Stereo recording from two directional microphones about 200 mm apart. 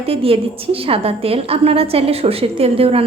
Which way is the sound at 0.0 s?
30° right (ahead or behind).